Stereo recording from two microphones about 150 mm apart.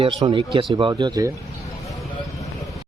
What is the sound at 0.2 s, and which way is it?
A man's voice, 30° right (ahead or behind).